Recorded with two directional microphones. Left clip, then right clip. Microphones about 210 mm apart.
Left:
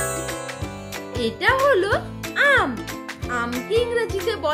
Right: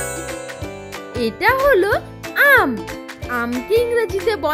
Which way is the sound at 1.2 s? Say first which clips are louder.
Right 3 dB; 40° right (ahead or behind).